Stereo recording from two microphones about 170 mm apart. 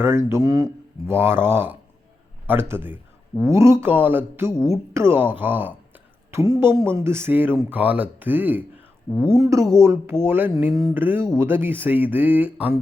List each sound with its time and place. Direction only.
0.0 s speech: 15° right (ahead or behind)